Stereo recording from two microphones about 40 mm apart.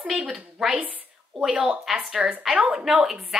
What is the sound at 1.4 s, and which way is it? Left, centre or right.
Speech, centre.